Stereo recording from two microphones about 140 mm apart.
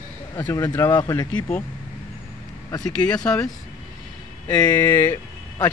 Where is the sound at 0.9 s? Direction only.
25° left (ahead or behind).